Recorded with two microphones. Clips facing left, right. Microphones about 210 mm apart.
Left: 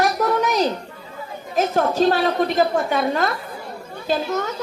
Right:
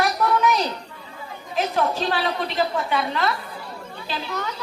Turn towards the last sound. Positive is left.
turn(degrees=45)  # may be behind; listen again after turning